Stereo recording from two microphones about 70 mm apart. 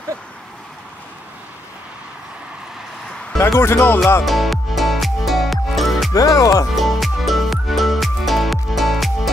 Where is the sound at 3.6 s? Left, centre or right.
Left.